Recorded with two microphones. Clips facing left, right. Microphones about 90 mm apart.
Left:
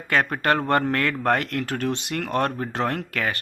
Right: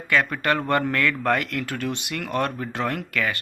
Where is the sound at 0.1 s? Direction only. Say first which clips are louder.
Left 1 dB; 40° left (ahead or behind).